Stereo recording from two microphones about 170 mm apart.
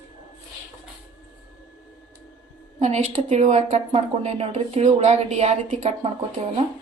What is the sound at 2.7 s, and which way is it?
A woman's voice, 40° right (ahead or behind).